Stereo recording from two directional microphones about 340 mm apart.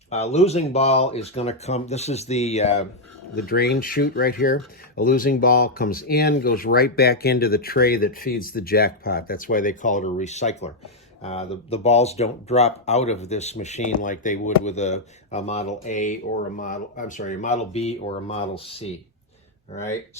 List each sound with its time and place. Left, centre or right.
0.1 s speech: centre